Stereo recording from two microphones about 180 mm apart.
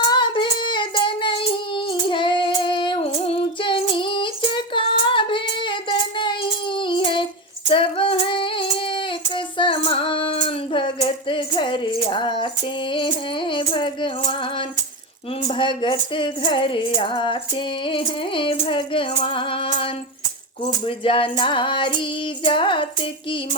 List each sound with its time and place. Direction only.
0.1 s child singing: 25° left (ahead or behind)
7.7 s female singing: 30° left (ahead or behind)
12.9 s music: 30° left (ahead or behind)
15.4 s music: 25° left (ahead or behind)